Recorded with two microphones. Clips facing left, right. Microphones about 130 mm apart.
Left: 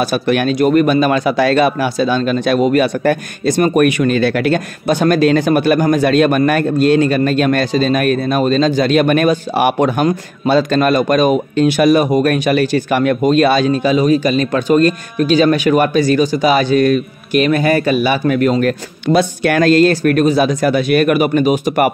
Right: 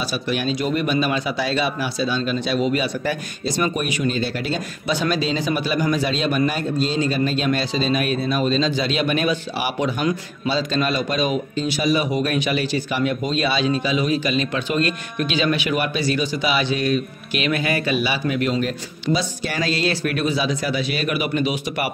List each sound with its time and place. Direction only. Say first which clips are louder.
0.0 s speech: left 9 dB; 60° left (ahead or behind)